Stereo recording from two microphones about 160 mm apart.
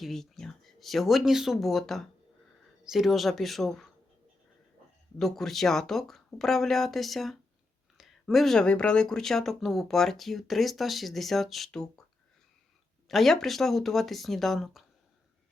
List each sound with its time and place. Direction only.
0.0 s speech: centre (ahead or behind)
5.2 s speech: centre (ahead or behind)
13.1 s speech: centre (ahead or behind)